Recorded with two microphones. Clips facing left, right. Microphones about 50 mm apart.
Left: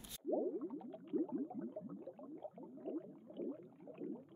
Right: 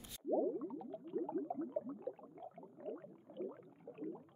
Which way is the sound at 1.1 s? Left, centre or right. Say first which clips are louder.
Even; right.